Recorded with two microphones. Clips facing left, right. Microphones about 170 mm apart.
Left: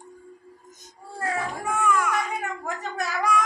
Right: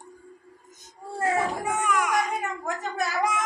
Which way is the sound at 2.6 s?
Centre (ahead or behind).